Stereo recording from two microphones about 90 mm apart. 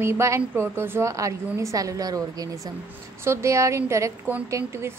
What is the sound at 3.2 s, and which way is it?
A woman's voice, 30° right (ahead or behind).